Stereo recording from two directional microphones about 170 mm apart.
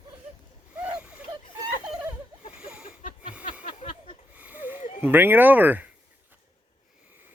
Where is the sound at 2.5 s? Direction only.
5° right (ahead or behind).